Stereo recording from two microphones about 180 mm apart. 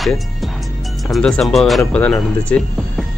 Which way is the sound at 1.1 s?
5° left (ahead or behind).